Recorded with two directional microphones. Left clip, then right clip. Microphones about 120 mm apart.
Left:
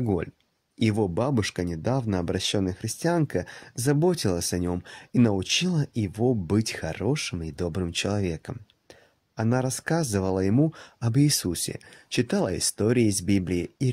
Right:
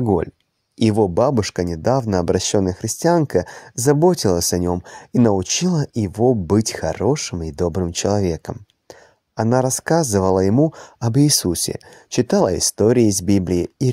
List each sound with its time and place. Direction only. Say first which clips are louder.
0.0 s speech: right 9 dB; 30° right (ahead or behind)
0.7 s speech: right 9 dB; 55° right (ahead or behind)
4.6 s speech: right 9 dB; 45° right (ahead or behind)